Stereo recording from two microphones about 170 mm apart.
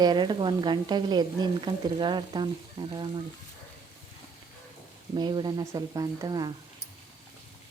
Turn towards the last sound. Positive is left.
turn(degrees=-25)  # may be behind; listen again after turning